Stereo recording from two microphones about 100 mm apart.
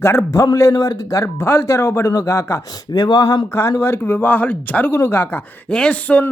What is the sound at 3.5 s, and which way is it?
Speech, 25° left (ahead or behind).